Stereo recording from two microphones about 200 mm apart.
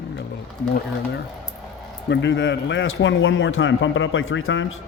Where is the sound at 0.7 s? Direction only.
60° left (ahead or behind); by 4.8 s 75° left (ahead or behind).